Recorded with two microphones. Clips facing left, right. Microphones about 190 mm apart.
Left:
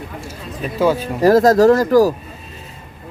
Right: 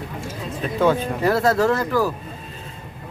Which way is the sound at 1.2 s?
40° left (ahead or behind).